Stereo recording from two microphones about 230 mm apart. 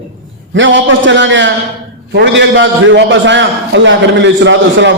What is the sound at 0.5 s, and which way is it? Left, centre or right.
A man's voice, right.